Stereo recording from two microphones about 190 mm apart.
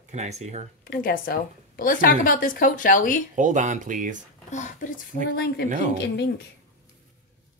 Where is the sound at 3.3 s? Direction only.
40° right (ahead or behind).